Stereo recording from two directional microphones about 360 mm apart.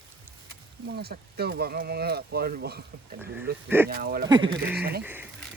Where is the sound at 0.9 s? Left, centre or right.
Right.